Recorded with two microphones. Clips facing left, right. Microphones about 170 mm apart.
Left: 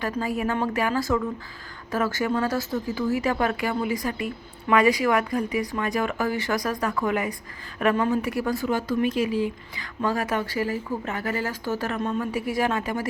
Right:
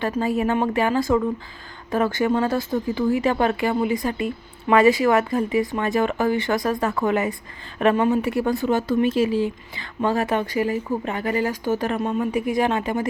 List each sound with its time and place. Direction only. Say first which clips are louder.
0.0 s a woman's voice: right 4 dB; 25° right (ahead or behind)